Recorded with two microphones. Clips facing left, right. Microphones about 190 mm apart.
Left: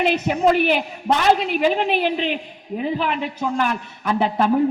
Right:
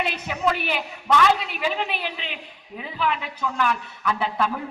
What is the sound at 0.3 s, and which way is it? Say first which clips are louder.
A woman's voice: left 6 dB; 40° left (ahead or behind).